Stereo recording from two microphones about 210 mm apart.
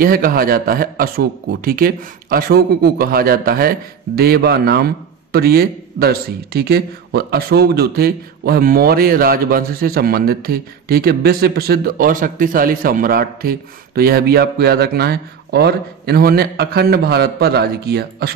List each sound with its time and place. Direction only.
0.0 s a man's voice: 45° right (ahead or behind)